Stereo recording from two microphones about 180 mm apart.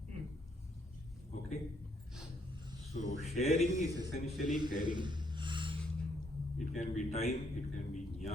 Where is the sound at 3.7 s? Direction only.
20° right (ahead or behind).